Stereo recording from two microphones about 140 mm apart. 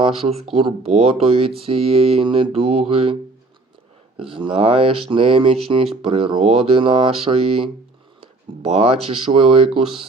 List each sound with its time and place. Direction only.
0.0 s speech: 45° right (ahead or behind)
4.2 s speech: 40° right (ahead or behind)